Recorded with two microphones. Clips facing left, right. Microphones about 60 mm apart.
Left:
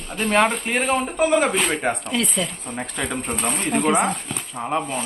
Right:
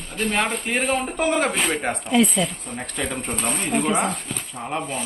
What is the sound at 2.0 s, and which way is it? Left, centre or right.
Speech, centre.